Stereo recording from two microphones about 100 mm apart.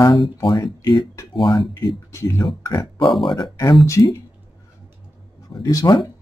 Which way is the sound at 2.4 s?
50° left (ahead or behind).